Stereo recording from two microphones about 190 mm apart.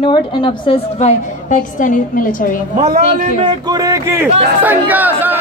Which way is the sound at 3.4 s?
20° right (ahead or behind).